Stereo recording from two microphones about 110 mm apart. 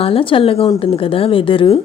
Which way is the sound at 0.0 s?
55° left (ahead or behind).